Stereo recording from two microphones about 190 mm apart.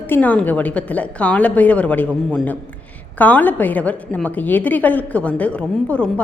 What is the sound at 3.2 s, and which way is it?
A woman's voice, 10° left (ahead or behind).